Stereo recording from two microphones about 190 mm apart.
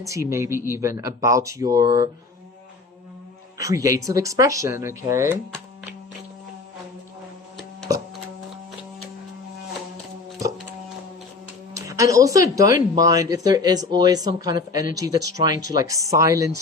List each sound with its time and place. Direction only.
0.0 s speech: 15° right (ahead or behind)
3.6 s speech: 15° right (ahead or behind)
11.7 s speech: 15° right (ahead or behind)